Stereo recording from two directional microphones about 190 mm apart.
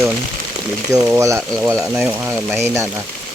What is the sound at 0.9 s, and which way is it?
Speech, 15° right (ahead or behind).